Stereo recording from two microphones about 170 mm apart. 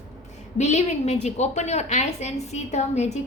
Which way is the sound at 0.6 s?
45° left (ahead or behind).